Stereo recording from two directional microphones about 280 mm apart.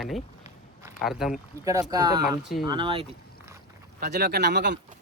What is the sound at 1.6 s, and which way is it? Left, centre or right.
Speech, centre.